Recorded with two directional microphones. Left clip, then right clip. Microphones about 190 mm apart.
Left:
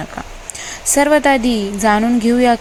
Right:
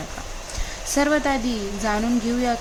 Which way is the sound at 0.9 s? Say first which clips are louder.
Left 9 dB; 20° left (ahead or behind).